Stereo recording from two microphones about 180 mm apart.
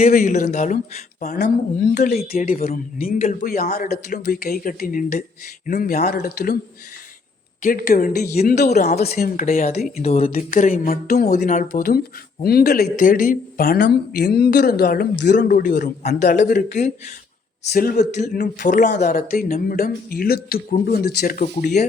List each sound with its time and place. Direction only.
0.0 s speech: 45° left (ahead or behind)
6.1 s speech: 60° left (ahead or behind)
7.6 s speech: 50° left (ahead or behind)
8.4 s speech: 40° left (ahead or behind)
9.0 s speech: 55° left (ahead or behind)
10.0 s speech: 35° left (ahead or behind)
10.3 s speech: 45° left (ahead or behind)
21.4 s speech: 40° left (ahead or behind)